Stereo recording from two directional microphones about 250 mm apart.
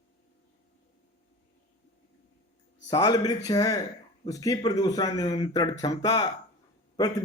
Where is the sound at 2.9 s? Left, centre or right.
Centre.